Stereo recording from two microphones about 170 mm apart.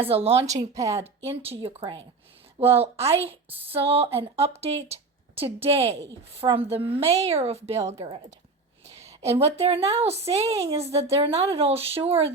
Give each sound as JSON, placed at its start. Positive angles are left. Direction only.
{"t": 0.0, "sound": "speech", "side_deg": -35}
{"t": 9.2, "sound": "speech", "side_deg": -35}